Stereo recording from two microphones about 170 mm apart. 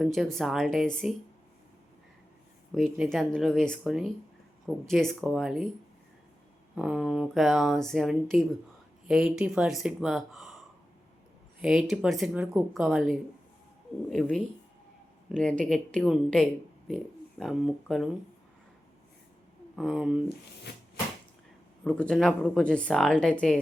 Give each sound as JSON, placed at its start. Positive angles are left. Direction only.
{"t": 0.0, "sound": "speech", "side_deg": 0}
{"t": 2.7, "sound": "speech", "side_deg": 0}
{"t": 6.7, "sound": "speech", "side_deg": 0}
{"t": 11.6, "sound": "speech", "side_deg": -5}
{"t": 19.7, "sound": "speech", "side_deg": 0}
{"t": 20.7, "sound": "a sound", "side_deg": 75}
{"t": 21.8, "sound": "speech", "side_deg": 5}